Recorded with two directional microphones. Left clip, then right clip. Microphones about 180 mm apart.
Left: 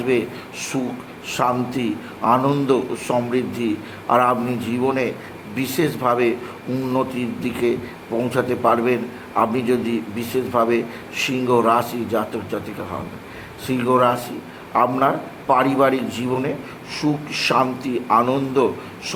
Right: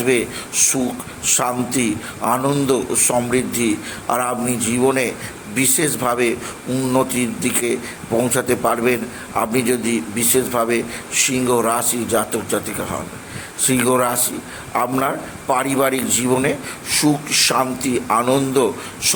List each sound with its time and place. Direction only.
0.0 s a man's voice: 10° right (ahead or behind)